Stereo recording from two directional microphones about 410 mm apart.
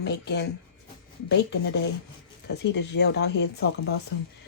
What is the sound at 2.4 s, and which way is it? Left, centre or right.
A woman's voice, left.